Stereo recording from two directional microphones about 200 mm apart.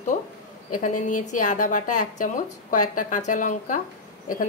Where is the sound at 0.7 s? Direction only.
40° left (ahead or behind).